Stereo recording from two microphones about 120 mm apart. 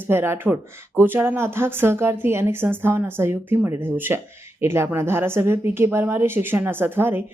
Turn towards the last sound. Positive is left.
turn(degrees=-20)  # may be behind; listen again after turning